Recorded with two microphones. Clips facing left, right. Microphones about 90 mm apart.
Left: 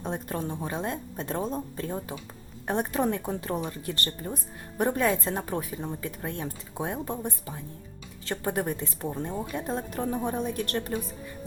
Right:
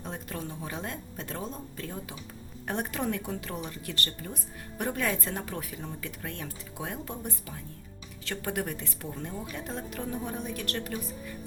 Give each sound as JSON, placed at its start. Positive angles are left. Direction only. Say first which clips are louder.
{"t": 0.0, "sound": "a woman's voice", "louder": "left 6 dB", "side_deg": 35}